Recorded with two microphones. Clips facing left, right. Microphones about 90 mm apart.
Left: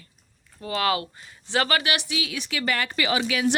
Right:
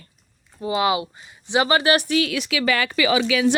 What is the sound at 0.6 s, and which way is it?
Speech, 15° right (ahead or behind).